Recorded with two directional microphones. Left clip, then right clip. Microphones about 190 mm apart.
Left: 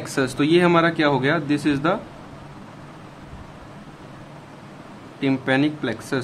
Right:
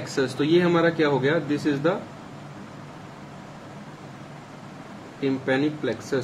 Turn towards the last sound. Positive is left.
turn(degrees=40)  # may be behind; listen again after turning